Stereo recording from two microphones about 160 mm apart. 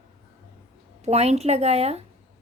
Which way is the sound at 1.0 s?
40° right (ahead or behind).